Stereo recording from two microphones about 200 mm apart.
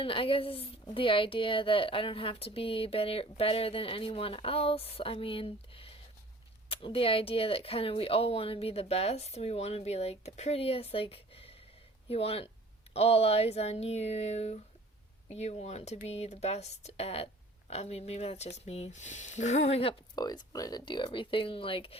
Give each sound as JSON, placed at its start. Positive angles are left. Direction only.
{"t": 0.0, "sound": "a woman's voice", "side_deg": 25}